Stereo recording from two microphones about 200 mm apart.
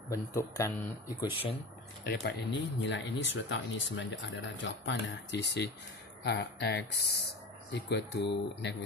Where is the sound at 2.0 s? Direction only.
55° left (ahead or behind).